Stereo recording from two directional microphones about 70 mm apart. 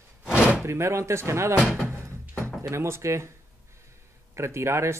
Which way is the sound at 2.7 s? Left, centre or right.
Right.